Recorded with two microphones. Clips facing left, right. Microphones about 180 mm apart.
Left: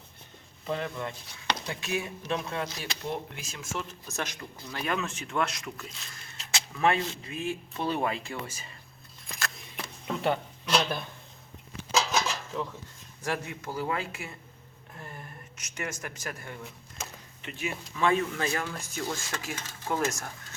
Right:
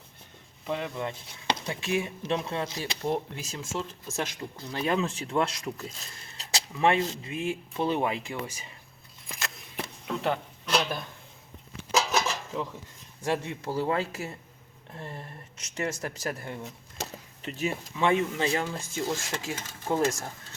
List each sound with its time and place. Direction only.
0.7 s speech: 15° right (ahead or behind); by 6.7 s 35° right (ahead or behind)
6.7 s speech: 20° right (ahead or behind)
9.4 s a sound: 25° right (ahead or behind)
10.1 s a sound: centre (ahead or behind)
13.2 s speech: 25° right (ahead or behind)
17.9 s speech: 20° right (ahead or behind)